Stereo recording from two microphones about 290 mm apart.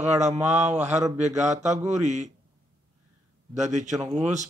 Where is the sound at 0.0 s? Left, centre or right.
Right.